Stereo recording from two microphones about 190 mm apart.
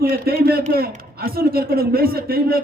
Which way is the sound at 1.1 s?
50° right (ahead or behind).